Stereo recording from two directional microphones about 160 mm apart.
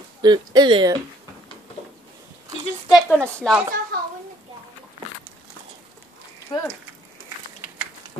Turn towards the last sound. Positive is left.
turn(degrees=30)  # may be behind; listen again after turning